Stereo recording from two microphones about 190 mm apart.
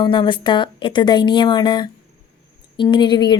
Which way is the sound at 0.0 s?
25° left (ahead or behind).